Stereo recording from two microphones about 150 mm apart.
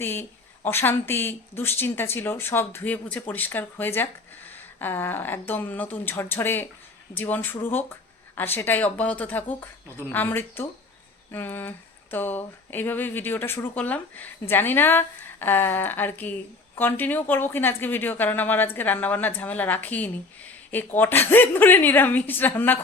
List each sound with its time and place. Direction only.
0.0 s speech: 15° left (ahead or behind)